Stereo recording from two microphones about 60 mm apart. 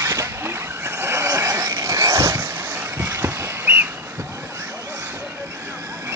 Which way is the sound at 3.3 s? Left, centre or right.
Right.